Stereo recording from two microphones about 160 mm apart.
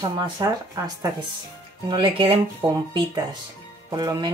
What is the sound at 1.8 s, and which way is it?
Speech, 30° right (ahead or behind).